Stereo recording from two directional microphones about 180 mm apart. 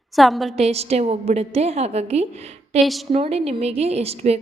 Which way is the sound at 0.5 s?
35° right (ahead or behind).